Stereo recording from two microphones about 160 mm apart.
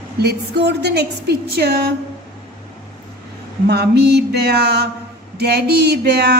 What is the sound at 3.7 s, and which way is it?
A woman's voice, 90° right.